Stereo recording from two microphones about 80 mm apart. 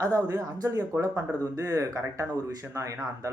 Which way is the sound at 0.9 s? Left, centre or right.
Right.